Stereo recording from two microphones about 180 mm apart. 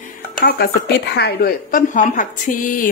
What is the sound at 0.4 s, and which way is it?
Speech, 60° left (ahead or behind).